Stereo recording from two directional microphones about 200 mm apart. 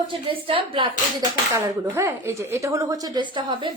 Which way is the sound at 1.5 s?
15° right (ahead or behind).